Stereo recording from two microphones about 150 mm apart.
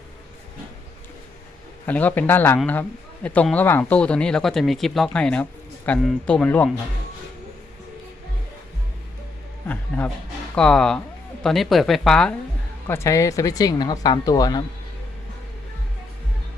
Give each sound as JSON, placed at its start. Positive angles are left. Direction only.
{"t": 1.9, "sound": "speech", "side_deg": 10}
{"t": 9.9, "sound": "speech", "side_deg": 10}
{"t": 12.9, "sound": "speech", "side_deg": 20}